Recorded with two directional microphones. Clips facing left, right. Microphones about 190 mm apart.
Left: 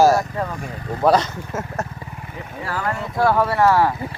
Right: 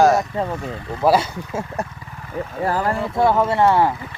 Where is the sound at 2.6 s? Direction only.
35° right (ahead or behind).